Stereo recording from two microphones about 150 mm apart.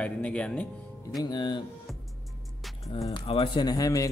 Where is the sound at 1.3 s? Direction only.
30° left (ahead or behind).